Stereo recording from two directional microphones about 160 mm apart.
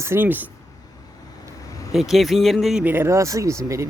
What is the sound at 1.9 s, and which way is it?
Speech, centre (ahead or behind).